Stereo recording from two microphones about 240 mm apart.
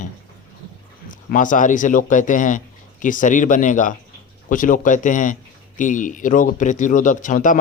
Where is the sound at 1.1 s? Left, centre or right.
Left.